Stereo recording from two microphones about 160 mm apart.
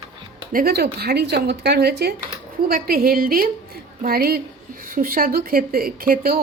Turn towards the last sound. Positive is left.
turn(degrees=-65)  # may be behind; listen again after turning